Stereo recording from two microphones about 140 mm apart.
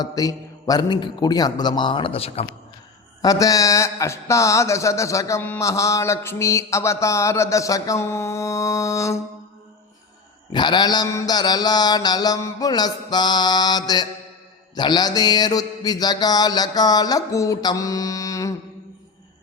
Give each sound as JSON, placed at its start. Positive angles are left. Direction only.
{"t": 0.0, "sound": "a man's voice", "side_deg": 25}
{"t": 3.2, "sound": "speech", "side_deg": 25}
{"t": 10.5, "sound": "speech", "side_deg": 30}